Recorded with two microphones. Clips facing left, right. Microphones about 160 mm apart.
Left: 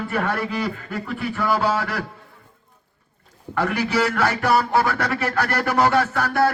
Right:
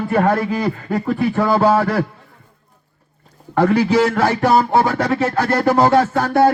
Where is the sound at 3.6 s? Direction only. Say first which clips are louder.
Right 7 dB; 30° right (ahead or behind).